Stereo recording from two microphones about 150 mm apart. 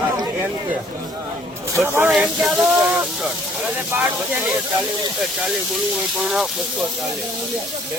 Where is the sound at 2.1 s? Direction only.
5° right (ahead or behind).